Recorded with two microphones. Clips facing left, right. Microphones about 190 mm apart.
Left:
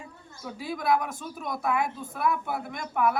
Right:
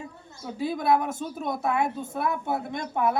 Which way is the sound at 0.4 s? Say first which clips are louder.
Right 3 dB; 25° right (ahead or behind).